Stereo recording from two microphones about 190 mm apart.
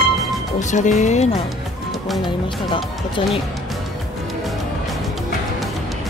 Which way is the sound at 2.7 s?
25° left (ahead or behind).